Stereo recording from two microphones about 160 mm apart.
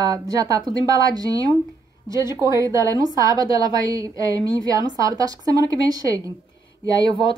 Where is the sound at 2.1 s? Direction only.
25° left (ahead or behind).